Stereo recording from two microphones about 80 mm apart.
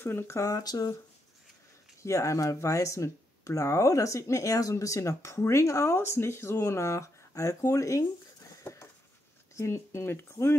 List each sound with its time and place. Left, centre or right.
0.0 s speech: left
2.0 s speech: left
8.6 s patter: left
9.6 s speech: left